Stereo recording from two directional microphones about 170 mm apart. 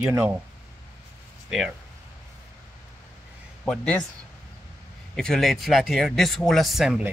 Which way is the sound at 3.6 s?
5° left (ahead or behind).